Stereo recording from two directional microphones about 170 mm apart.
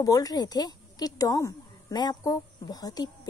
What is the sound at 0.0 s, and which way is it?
A woman's voice, 20° left (ahead or behind).